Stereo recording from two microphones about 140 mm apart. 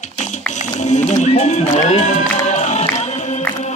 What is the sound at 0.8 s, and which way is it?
Music, 60° left (ahead or behind).